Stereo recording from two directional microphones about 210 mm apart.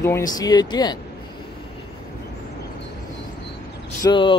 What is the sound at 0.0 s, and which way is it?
Speech, 15° left (ahead or behind).